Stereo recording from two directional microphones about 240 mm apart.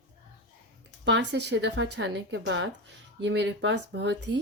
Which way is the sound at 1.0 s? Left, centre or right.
Right.